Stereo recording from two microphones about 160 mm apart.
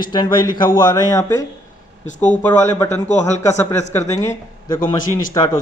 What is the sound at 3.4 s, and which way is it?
A man's voice, 15° left (ahead or behind).